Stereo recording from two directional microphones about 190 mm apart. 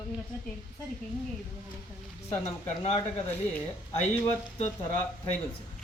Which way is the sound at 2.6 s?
30° left (ahead or behind).